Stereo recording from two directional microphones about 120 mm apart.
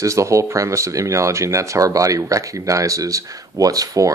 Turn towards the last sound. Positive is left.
turn(degrees=-30)  # may be behind; listen again after turning